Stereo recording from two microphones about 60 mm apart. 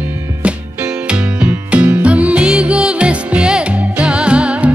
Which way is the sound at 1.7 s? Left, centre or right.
Right.